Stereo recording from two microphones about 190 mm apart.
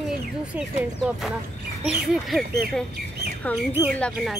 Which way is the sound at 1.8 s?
5° right (ahead or behind).